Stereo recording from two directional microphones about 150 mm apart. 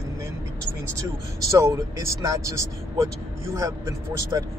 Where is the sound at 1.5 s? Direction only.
20° right (ahead or behind).